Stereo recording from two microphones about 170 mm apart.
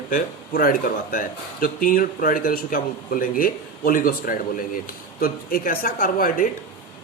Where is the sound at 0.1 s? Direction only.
60° left (ahead or behind).